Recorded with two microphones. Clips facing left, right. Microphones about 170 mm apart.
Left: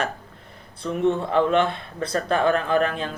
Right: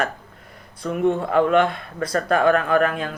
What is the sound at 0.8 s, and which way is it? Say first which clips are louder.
Speech: right 1 dB; 50° right (ahead or behind).